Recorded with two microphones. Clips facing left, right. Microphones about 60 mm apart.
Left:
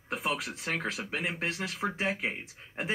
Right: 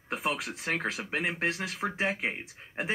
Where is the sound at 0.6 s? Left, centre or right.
Centre.